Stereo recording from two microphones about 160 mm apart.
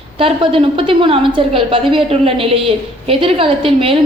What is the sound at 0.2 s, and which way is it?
A woman's voice, 35° right (ahead or behind).